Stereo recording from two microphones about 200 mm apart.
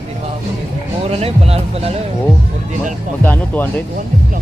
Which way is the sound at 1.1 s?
30° right (ahead or behind).